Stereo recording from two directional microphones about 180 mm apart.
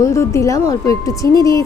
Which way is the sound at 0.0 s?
15° left (ahead or behind).